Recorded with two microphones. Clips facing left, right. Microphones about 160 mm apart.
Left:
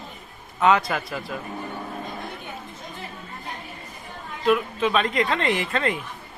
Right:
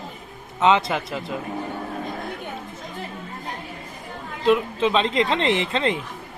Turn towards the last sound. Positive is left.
turn(degrees=-25)  # may be behind; listen again after turning